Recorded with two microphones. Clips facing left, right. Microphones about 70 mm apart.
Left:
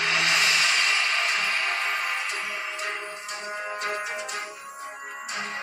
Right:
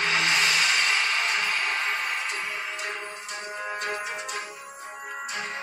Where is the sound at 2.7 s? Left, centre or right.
Left.